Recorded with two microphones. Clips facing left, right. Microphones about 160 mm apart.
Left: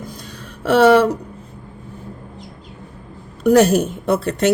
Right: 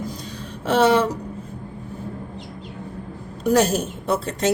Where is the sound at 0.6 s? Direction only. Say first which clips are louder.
Left 5 dB; 60° left (ahead or behind).